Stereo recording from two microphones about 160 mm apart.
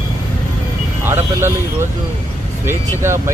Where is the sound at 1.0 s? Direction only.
15° right (ahead or behind).